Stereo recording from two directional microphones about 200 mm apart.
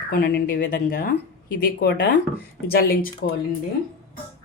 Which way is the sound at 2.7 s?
50° left (ahead or behind).